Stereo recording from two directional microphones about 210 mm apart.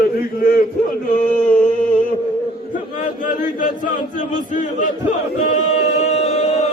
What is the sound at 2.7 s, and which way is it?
Speech, 40° left (ahead or behind).